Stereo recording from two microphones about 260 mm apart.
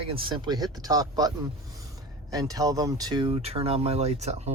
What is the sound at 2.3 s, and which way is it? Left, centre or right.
Speech, centre.